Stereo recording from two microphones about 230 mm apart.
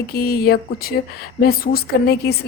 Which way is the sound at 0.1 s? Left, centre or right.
Left.